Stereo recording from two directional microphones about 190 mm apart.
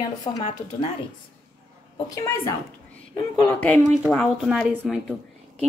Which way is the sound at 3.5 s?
10° left (ahead or behind).